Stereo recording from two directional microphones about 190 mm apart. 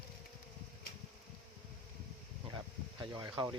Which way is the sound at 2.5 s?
20° right (ahead or behind).